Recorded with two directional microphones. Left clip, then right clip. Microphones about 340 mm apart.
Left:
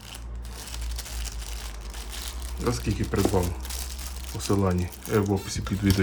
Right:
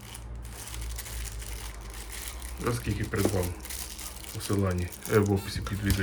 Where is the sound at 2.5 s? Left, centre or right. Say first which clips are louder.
Left 3 dB; centre.